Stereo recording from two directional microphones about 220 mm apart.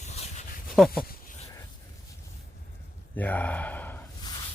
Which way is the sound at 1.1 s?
40° left (ahead or behind).